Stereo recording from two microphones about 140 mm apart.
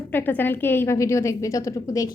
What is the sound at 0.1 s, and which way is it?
A woman's voice, 15° left (ahead or behind).